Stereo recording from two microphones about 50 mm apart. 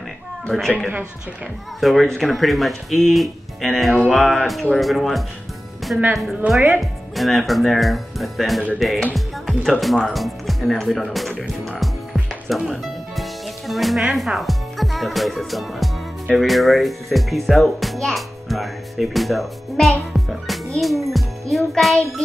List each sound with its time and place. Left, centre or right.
0.5 s speech: centre
5.9 s speech: right
6.8 s speech: centre
11.8 s music: centre
16.3 s a child's voice: centre